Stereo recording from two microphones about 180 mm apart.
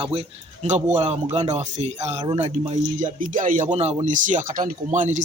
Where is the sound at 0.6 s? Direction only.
40° right (ahead or behind).